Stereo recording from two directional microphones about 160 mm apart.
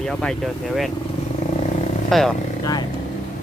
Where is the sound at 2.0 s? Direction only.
Centre (ahead or behind).